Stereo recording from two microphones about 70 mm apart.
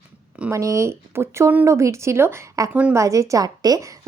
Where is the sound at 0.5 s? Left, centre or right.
Right.